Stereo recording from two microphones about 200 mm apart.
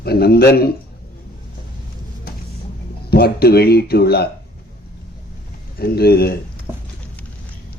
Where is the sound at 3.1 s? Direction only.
50° left (ahead or behind).